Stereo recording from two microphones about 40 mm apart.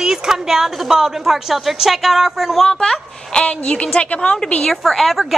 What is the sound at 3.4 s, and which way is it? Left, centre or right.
A woman's voice, left.